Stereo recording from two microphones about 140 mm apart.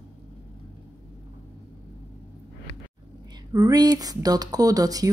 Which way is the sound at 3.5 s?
25° right (ahead or behind).